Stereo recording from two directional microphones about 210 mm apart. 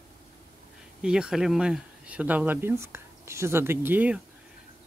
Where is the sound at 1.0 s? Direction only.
5° right (ahead or behind).